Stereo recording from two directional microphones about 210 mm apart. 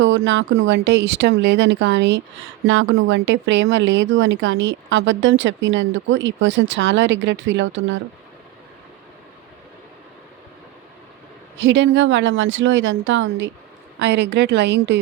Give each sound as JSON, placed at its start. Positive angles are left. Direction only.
{"t": 0.0, "sound": "speech", "side_deg": -65}
{"t": 11.5, "sound": "speech", "side_deg": -60}